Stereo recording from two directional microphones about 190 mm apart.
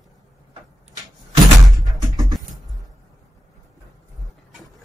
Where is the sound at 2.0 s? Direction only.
20° right (ahead or behind).